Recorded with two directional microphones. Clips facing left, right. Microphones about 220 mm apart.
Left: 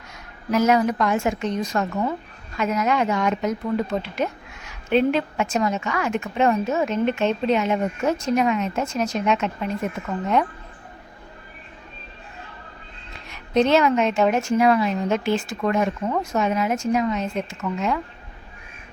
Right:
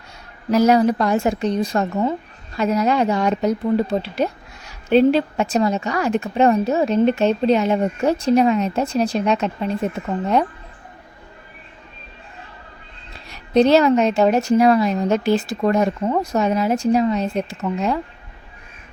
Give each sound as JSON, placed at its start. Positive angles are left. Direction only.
{"t": 0.5, "sound": "a woman's voice", "side_deg": -35}
{"t": 13.2, "sound": "a woman's voice", "side_deg": -35}